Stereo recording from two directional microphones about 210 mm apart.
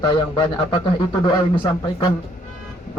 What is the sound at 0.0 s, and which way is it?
A man's voice, 20° left (ahead or behind).